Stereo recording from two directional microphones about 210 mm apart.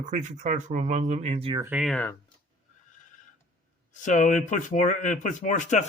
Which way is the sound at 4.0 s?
35° left (ahead or behind).